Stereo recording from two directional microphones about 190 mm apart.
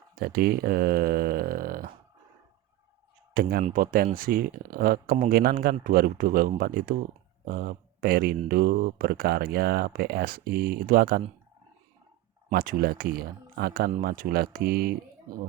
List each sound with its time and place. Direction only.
0.2 s speech: 50° right (ahead or behind)
3.6 s speech: 45° right (ahead or behind)
12.5 s speech: 50° right (ahead or behind)